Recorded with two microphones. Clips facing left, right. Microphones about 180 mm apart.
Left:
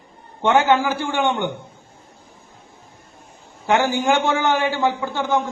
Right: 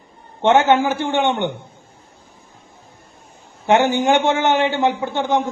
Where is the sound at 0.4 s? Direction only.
20° right (ahead or behind).